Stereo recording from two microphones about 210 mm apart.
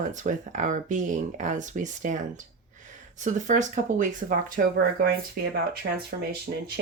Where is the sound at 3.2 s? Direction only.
35° right (ahead or behind).